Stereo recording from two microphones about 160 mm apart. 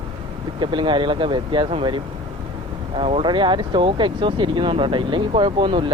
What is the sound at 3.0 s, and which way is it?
Speech, 35° right (ahead or behind).